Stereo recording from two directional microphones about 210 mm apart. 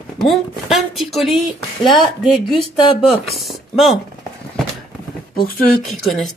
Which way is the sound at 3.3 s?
Centre (ahead or behind).